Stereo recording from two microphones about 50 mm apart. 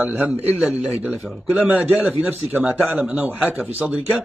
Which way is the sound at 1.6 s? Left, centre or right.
Right.